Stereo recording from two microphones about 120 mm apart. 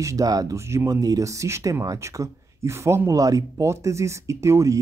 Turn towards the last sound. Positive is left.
turn(degrees=-25)  # may be behind; listen again after turning